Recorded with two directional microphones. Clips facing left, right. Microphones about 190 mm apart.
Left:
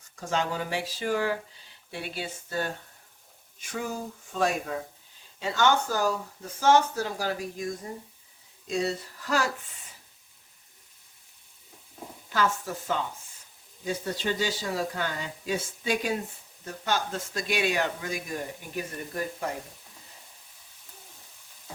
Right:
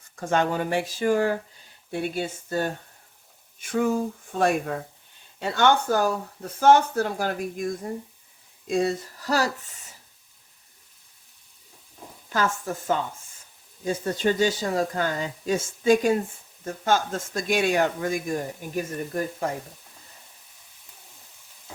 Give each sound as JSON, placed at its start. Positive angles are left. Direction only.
{"t": 0.2, "sound": "speech", "side_deg": -55}
{"t": 12.3, "sound": "speech", "side_deg": -45}